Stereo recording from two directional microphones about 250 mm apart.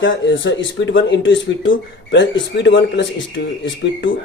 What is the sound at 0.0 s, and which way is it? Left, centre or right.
Speech, left.